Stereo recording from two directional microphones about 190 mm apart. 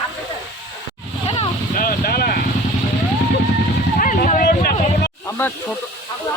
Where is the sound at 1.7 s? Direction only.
50° left (ahead or behind).